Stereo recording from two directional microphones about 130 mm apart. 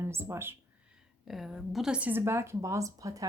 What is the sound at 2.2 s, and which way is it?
Speech, 20° right (ahead or behind).